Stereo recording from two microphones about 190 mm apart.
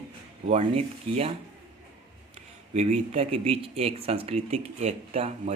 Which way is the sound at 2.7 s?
35° right (ahead or behind).